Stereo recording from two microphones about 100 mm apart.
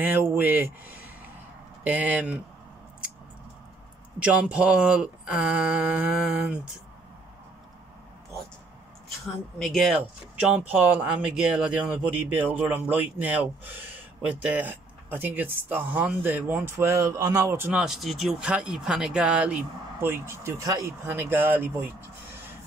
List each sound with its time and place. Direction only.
0.0 s a man's voice: 20° right (ahead or behind)
4.2 s a man's voice: 10° right (ahead or behind)
9.6 s speech: centre (ahead or behind)
10.3 s a man's voice: 10° right (ahead or behind); by 17.6 s 30° right (ahead or behind)
17.7 s a man's voice: 5° right (ahead or behind)
20.0 s speech: 25° right (ahead or behind)